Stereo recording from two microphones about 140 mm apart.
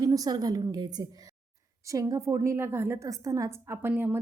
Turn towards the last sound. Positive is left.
turn(degrees=-15)  # may be behind; listen again after turning